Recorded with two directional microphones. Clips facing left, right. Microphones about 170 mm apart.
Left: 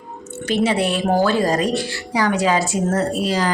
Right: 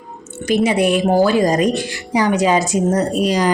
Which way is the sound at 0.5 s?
10° right (ahead or behind).